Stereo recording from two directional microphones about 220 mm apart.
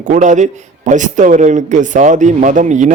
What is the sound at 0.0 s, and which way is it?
A man's voice, 35° right (ahead or behind).